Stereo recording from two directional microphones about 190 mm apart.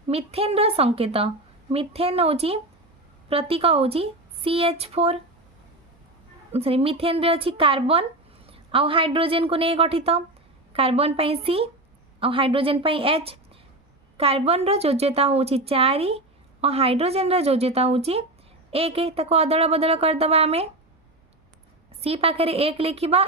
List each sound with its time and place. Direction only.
0.1 s a woman's voice: 30° right (ahead or behind)
6.5 s a woman's voice: 30° right (ahead or behind)
22.0 s a woman's voice: 30° right (ahead or behind)